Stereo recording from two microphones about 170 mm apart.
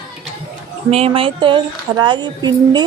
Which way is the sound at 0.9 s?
35° right (ahead or behind).